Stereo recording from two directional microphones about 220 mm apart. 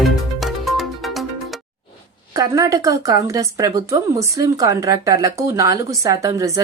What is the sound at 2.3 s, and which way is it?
Speech, 15° right (ahead or behind).